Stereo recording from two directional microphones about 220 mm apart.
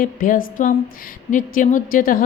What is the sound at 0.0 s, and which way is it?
A woman's voice, 40° left (ahead or behind).